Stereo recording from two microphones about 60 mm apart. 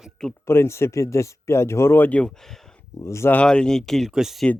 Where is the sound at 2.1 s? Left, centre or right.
Centre.